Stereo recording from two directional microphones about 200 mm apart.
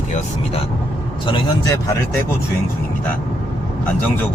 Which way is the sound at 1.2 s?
25° left (ahead or behind).